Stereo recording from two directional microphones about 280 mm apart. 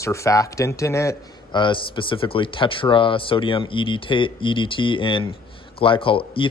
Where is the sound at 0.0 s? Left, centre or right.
Centre.